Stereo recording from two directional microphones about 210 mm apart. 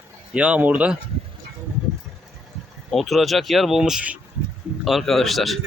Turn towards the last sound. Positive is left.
turn(degrees=0)  # may be behind; listen again after turning